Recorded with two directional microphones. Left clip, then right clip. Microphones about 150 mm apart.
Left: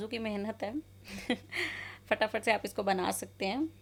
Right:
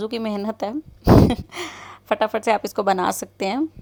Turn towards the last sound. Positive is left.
turn(degrees=-45)  # may be behind; listen again after turning